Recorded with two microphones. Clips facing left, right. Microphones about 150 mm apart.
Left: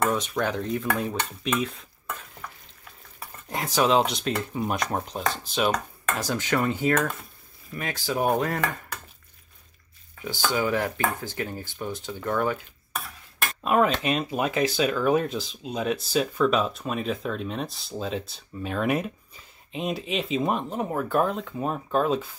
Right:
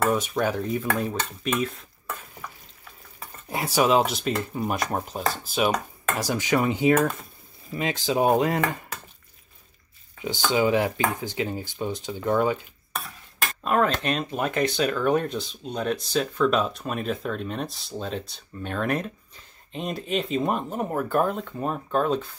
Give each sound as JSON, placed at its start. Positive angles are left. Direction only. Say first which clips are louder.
{"t": 0.0, "sound": "speech", "louder": "right 2 dB", "side_deg": -5}
{"t": 3.2, "sound": "speech", "louder": "right 2 dB", "side_deg": -5}
{"t": 7.7, "sound": "speech", "louder": "right 4 dB", "side_deg": -20}
{"t": 10.2, "sound": "speech", "louder": "right 3 dB", "side_deg": -20}
{"t": 12.9, "sound": "cutlery", "louder": "right 1 dB", "side_deg": 5}
{"t": 14.0, "sound": "speech", "louder": "left 1 dB", "side_deg": 5}